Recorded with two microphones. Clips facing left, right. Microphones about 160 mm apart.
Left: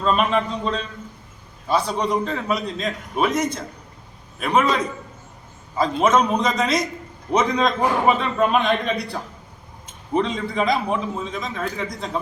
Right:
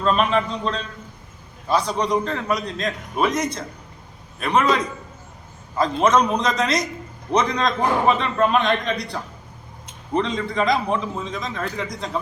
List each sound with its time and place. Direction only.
0.0 s a man's voice: centre (ahead or behind)